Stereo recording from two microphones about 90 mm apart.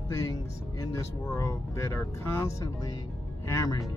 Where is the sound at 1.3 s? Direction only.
35° left (ahead or behind).